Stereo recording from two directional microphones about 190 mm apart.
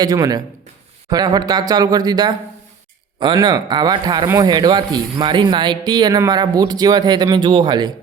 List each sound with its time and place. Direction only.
0.0 s speech: 20° right (ahead or behind)